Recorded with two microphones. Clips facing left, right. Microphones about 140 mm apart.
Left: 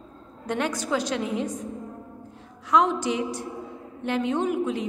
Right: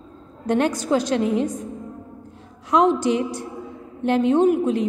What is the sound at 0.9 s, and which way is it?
Speech, 55° right (ahead or behind).